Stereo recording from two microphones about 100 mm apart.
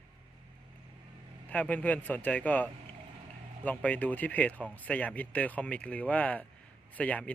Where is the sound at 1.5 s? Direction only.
15° left (ahead or behind).